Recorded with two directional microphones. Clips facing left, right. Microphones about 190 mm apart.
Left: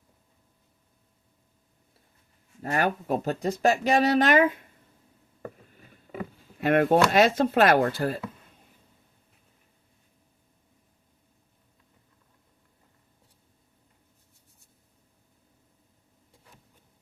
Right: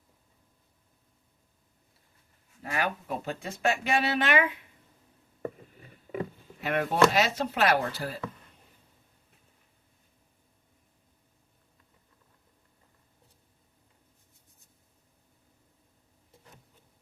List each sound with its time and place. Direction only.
2.6 s speech: 45° left (ahead or behind)
6.6 s speech: 55° left (ahead or behind)